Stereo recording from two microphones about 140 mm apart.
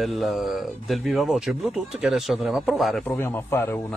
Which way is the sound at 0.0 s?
Centre (ahead or behind).